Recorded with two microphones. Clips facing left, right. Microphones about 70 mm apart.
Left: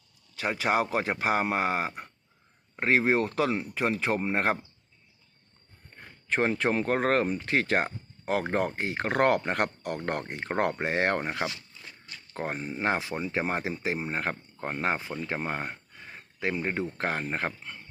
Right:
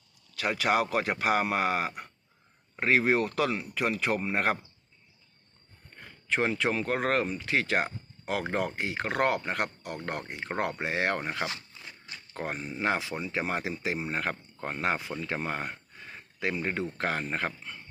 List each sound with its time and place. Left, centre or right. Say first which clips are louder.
0.3 s speech: even; left
6.2 s speech: left 2 dB; left
12.0 s a sound: left 1 dB; centre
12.4 s speech: left 1 dB; left